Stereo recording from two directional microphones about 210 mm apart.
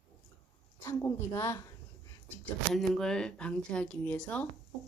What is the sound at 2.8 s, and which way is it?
Speech, 5° left (ahead or behind).